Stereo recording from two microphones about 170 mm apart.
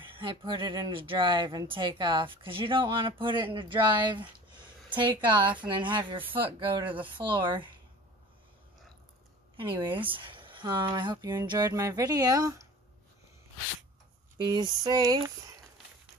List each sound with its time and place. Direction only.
0.0 s speech: 30° right (ahead or behind)
9.6 s speech: 30° right (ahead or behind)
14.4 s speech: 25° right (ahead or behind)